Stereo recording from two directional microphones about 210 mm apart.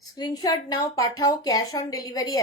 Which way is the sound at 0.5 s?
15° left (ahead or behind).